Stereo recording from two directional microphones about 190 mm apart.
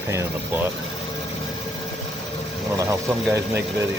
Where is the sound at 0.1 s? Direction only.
15° right (ahead or behind).